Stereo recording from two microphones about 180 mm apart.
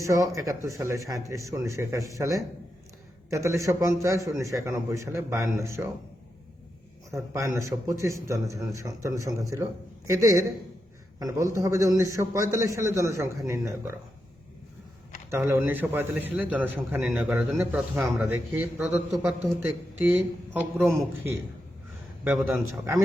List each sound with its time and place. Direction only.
0.0 s a man's voice: 15° right (ahead or behind)
7.1 s a man's voice: 15° right (ahead or behind)
15.3 s a man's voice: 15° right (ahead or behind)
22.2 s a man's voice: 10° right (ahead or behind)